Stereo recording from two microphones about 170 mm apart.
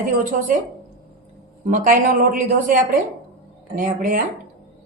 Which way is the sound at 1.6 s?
50° right (ahead or behind).